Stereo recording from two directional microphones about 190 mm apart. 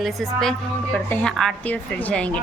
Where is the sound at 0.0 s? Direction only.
Centre (ahead or behind).